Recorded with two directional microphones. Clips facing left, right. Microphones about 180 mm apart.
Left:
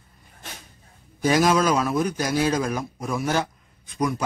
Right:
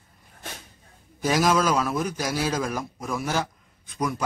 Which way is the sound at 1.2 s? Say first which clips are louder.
Left 2 dB; centre (ahead or behind).